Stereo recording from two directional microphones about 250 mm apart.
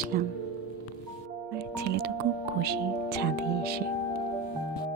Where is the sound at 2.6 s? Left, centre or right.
Right.